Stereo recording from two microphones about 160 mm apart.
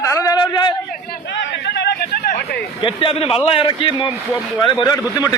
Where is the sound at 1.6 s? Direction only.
90° left.